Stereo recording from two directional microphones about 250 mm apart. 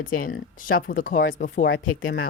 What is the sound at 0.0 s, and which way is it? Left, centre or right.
Speech, left.